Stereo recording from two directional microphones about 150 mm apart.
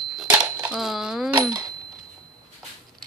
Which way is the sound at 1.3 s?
30° right (ahead or behind).